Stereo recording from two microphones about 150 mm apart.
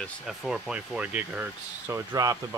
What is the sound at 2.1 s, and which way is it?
Speech, 25° right (ahead or behind).